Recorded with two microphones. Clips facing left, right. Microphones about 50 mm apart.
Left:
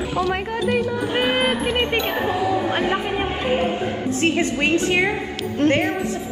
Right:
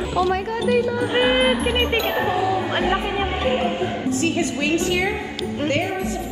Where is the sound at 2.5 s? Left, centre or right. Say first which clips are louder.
Left 1 dB; centre.